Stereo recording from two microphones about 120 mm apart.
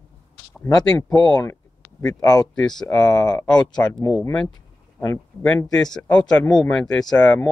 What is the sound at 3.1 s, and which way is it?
Speech, 30° left (ahead or behind).